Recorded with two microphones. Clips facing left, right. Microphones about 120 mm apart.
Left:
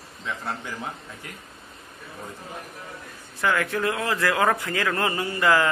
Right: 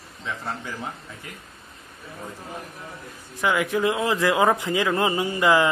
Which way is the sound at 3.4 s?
15° right (ahead or behind).